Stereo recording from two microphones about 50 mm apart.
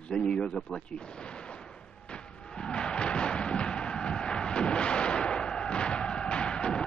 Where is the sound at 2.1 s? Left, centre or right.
Centre.